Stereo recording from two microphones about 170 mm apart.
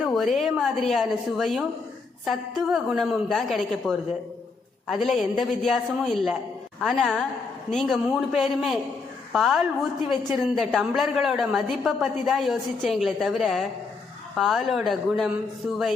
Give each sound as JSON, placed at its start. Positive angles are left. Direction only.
{"t": 0.1, "sound": "a woman's voice", "side_deg": 0}